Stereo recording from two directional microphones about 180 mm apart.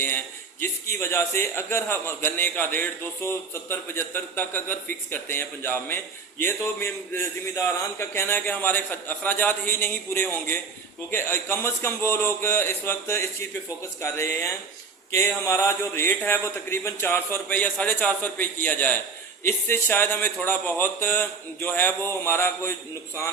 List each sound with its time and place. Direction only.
0.6 s a man's voice: 15° left (ahead or behind)